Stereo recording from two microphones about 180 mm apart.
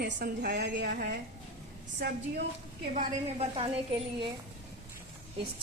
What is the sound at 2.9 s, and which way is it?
Speech, 35° right (ahead or behind).